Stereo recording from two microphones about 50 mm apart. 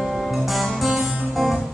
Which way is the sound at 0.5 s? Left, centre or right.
Centre.